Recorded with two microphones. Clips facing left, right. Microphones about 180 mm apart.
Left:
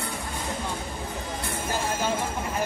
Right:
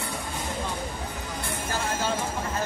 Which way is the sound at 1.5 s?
15° left (ahead or behind).